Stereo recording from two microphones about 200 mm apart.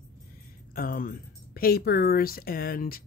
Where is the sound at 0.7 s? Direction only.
45° left (ahead or behind).